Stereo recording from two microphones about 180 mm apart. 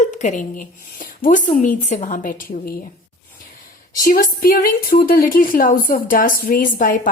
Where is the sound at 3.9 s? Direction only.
50° left (ahead or behind).